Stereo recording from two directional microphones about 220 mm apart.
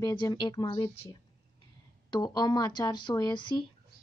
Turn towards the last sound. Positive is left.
turn(degrees=20)  # may be behind; listen again after turning